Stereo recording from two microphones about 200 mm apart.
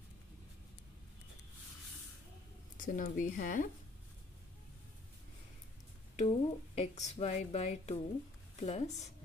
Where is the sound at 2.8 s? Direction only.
40° left (ahead or behind).